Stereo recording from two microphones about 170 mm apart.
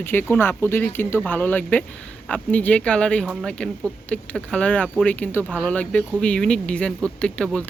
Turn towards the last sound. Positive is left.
turn(degrees=5)  # may be behind; listen again after turning